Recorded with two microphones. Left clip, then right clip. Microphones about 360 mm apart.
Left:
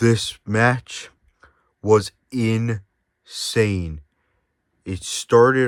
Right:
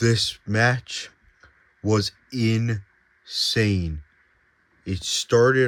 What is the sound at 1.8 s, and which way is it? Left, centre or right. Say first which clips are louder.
Speech: left 7 dB; centre.